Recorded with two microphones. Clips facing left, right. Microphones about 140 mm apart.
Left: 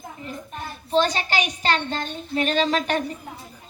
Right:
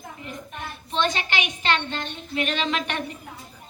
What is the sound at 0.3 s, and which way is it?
A woman's voice, 35° left (ahead or behind).